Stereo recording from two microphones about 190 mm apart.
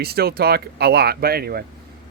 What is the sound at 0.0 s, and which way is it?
Speech, 55° right (ahead or behind).